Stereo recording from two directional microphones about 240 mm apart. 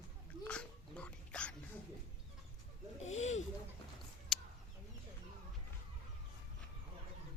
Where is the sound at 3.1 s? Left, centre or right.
Left.